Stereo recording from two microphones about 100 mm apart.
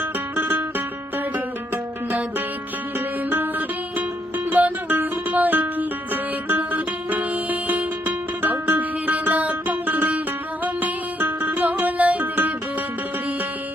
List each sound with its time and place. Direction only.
0.0 s music: 20° right (ahead or behind)
1.7 s music: 15° right (ahead or behind)
3.2 s music: 20° right (ahead or behind)
4.5 s music: 20° right (ahead or behind)